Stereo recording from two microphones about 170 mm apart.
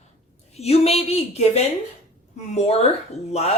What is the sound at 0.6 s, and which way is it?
Speech, 40° left (ahead or behind).